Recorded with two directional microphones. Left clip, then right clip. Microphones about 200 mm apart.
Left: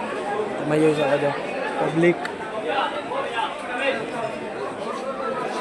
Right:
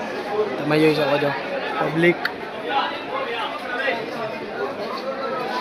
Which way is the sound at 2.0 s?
5° left (ahead or behind).